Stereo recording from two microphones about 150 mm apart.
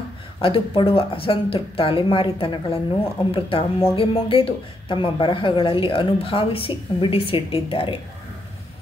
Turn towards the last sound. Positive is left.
turn(degrees=35)  # may be behind; listen again after turning